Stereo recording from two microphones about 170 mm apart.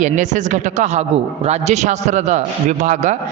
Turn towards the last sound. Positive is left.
turn(degrees=-45)  # may be behind; listen again after turning